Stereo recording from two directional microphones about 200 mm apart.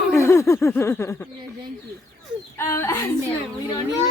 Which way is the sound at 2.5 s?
15° left (ahead or behind).